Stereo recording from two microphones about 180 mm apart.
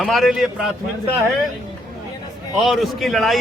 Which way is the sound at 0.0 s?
Centre (ahead or behind).